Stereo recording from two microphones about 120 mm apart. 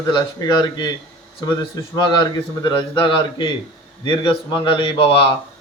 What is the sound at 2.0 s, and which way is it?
Speech, 40° left (ahead or behind).